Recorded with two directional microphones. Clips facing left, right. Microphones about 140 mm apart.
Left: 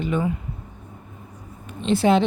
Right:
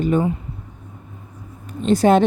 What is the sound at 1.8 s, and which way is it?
Speech, 45° right (ahead or behind).